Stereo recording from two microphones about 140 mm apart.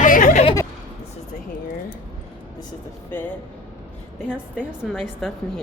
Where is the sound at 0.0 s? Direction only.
70° left (ahead or behind).